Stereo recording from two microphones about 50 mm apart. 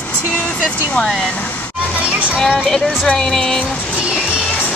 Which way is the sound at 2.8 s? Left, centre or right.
Left.